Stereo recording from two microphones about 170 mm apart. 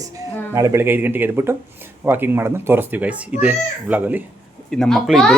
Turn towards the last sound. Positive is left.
turn(degrees=0)  # may be behind; listen again after turning